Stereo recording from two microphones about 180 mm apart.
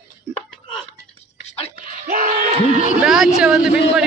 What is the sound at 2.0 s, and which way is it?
Crowd, 55° right (ahead or behind).